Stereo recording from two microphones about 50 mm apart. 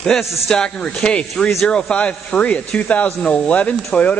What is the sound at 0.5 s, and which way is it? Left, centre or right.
Speech, centre.